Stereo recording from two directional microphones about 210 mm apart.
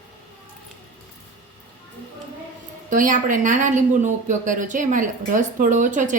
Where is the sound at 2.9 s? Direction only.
40° right (ahead or behind).